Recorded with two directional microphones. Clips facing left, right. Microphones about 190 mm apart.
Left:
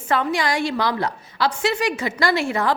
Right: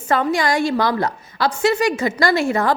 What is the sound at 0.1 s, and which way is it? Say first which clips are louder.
A woman's voice: right 3 dB; 45° right (ahead or behind).